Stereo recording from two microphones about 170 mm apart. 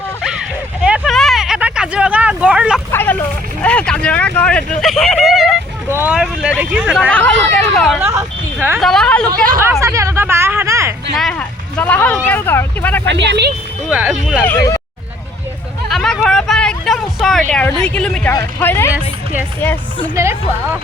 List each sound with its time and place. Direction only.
0.3 s a sound: 5° right (ahead or behind)
2.9 s vehicle: 10° left (ahead or behind)
5.9 s speech: 10° right (ahead or behind)
7.1 s speech: 5° left (ahead or behind)
7.9 s speech: 15° right (ahead or behind)
8.8 s a woman's voice: 5° left (ahead or behind)
9.8 s a sound: 15° right (ahead or behind)
11.2 s vehicle: 5° left (ahead or behind)
13.1 s speech: 90° right
13.9 s a woman's voice: 5° right (ahead or behind)
14.3 s speech: 10° left (ahead or behind)
15.9 s a sound: centre (ahead or behind)
17.5 s a woman's voice: 5° left (ahead or behind)